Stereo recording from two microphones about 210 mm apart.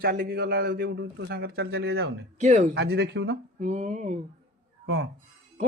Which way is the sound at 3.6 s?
35° right (ahead or behind).